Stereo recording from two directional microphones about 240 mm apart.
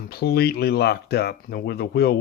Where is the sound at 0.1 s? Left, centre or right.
Left.